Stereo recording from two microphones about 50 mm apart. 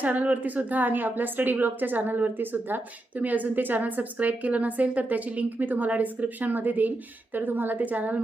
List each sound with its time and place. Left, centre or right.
0.0 s a woman's voice: right